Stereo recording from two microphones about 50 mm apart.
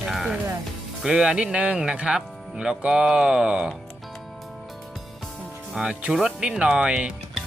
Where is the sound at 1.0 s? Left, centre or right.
Centre.